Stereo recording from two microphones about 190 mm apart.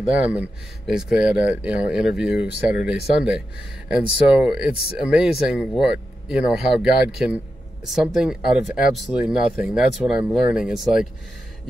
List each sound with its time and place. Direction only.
0.1 s speech: 10° right (ahead or behind)